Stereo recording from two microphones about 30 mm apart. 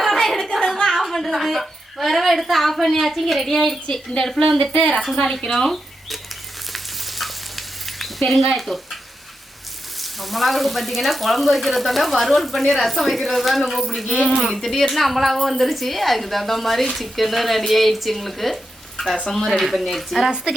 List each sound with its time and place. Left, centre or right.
0.0 s a sound: centre
0.9 s a woman's voice: centre
3.4 s frying: centre
4.2 s a woman's voice: centre
5.2 s frying: centre
10.0 s frying: centre
14.1 s speech: left
14.4 s frying: centre